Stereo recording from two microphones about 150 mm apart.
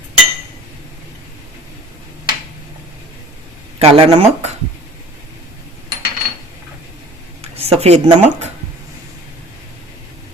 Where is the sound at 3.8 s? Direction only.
45° right (ahead or behind).